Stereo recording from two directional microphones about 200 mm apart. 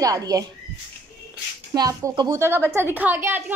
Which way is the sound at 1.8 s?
20° right (ahead or behind).